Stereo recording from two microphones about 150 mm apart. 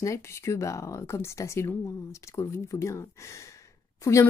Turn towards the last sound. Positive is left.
turn(degrees=20)  # may be behind; listen again after turning